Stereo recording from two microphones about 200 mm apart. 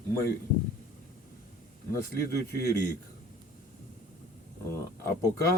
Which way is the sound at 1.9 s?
15° left (ahead or behind).